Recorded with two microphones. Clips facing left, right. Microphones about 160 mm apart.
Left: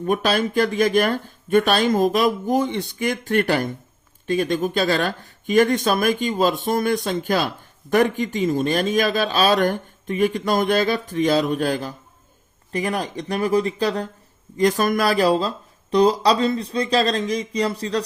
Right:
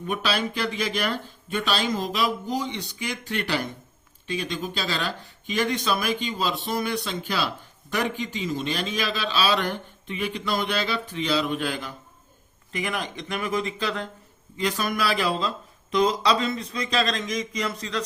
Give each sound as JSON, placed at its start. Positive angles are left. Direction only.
{"t": 0.0, "sound": "speech", "side_deg": 45}